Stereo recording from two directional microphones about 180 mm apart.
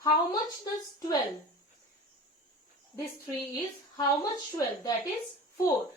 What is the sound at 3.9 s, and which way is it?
A woman's voice, 20° left (ahead or behind).